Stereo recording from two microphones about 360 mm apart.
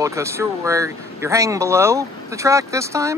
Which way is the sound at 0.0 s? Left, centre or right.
Centre.